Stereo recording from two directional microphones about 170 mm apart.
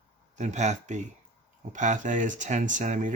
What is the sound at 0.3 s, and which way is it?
Speech, 45° right (ahead or behind).